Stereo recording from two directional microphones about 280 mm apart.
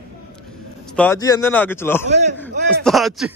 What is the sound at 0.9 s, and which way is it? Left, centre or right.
Speech, centre.